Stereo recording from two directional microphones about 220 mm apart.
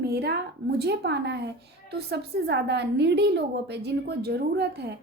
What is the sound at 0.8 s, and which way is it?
A woman's voice, 50° right (ahead or behind).